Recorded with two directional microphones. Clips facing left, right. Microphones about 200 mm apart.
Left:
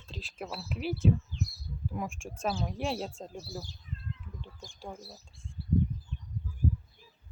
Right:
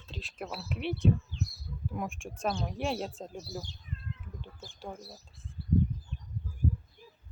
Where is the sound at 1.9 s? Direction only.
Centre (ahead or behind).